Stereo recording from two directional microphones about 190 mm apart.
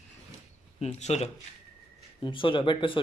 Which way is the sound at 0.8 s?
35° left (ahead or behind).